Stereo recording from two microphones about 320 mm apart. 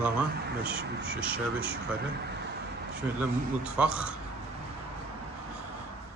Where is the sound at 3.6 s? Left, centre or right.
Centre.